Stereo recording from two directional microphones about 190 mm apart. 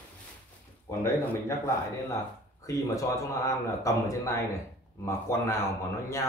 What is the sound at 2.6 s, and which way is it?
A man's voice, 15° left (ahead or behind).